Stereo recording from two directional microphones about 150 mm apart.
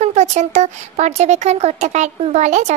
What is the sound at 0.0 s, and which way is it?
Speech, 50° right (ahead or behind).